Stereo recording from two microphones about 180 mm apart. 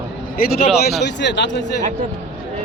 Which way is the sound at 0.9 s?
75° left (ahead or behind).